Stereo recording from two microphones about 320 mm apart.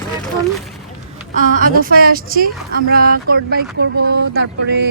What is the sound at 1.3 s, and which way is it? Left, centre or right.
A woman's voice, right.